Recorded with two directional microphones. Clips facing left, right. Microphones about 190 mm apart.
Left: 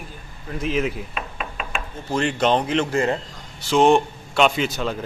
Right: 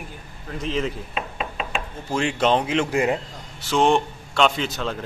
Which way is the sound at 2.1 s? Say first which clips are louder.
Left 1 dB; 5° right (ahead or behind).